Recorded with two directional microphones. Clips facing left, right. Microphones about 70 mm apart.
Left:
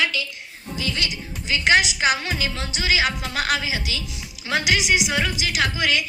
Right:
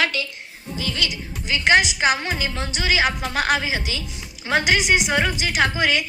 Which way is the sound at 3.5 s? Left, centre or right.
Right.